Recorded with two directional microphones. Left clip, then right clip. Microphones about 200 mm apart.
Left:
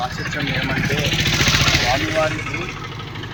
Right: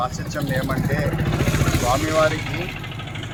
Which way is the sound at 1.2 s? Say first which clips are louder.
Left 7 dB; 35° right (ahead or behind).